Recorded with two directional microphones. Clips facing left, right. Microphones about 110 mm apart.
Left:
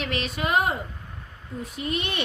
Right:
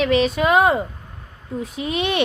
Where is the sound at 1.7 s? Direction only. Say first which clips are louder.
Right 6 dB; 90° right.